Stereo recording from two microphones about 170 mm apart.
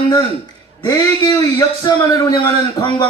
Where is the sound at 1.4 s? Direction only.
20° left (ahead or behind).